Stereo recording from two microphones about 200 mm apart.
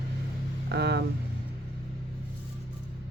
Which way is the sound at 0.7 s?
55° right (ahead or behind).